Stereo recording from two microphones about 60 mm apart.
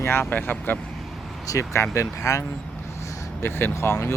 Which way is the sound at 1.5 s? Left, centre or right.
Left.